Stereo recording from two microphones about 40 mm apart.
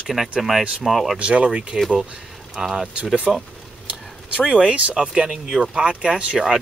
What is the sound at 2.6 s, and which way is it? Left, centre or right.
Speech, centre.